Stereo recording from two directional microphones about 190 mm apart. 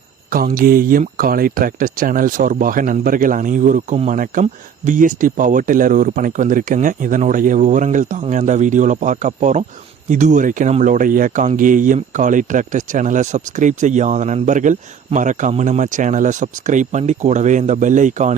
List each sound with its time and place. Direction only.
0.3 s speech: 50° right (ahead or behind)